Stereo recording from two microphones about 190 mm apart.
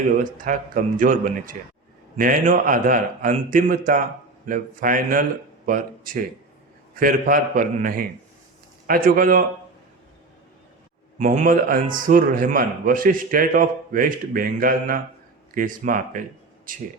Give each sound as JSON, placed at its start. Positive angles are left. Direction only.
{"t": 0.2, "sound": "a man's voice", "side_deg": -45}
{"t": 11.2, "sound": "a man's voice", "side_deg": -45}